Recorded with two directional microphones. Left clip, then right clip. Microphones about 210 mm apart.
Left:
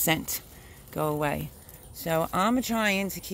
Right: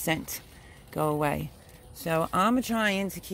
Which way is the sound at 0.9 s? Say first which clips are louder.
Right 1 dB; 10° right (ahead or behind).